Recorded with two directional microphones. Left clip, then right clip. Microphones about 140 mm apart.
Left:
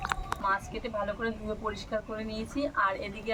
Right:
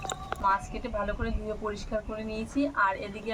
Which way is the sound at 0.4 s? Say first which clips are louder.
Right 3 dB; 5° right (ahead or behind).